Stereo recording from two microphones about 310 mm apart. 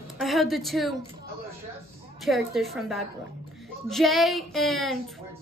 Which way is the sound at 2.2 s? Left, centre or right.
Centre.